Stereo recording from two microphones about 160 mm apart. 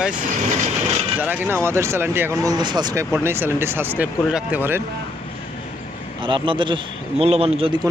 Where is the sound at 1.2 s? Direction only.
10° right (ahead or behind).